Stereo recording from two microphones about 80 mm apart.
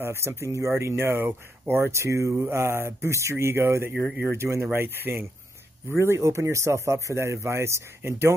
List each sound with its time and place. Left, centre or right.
0.0 s speech: right